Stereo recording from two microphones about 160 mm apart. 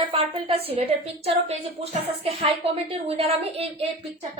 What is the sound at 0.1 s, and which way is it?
A woman's voice, 35° right (ahead or behind).